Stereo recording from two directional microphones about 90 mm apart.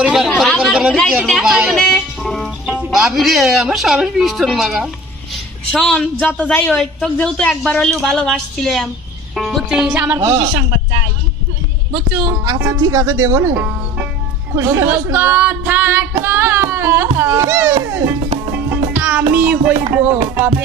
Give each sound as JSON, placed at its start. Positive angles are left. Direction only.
{"t": 0.0, "sound": "chatter", "side_deg": -10}
{"t": 1.8, "sound": "music", "side_deg": 5}
{"t": 2.6, "sound": "speech", "side_deg": -5}
{"t": 5.3, "sound": "a woman's voice", "side_deg": 10}
{"t": 6.7, "sound": "speech", "side_deg": 5}
{"t": 9.7, "sound": "speech", "side_deg": -10}
{"t": 10.2, "sound": "speech", "side_deg": -35}
{"t": 12.8, "sound": "speech", "side_deg": -35}
{"t": 16.2, "sound": "a sound", "side_deg": -25}
{"t": 17.2, "sound": "speech", "side_deg": -30}
{"t": 18.9, "sound": "music", "side_deg": -20}
{"t": 19.3, "sound": "speech", "side_deg": -15}